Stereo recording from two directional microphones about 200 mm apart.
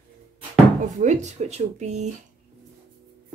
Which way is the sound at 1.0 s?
35° right (ahead or behind).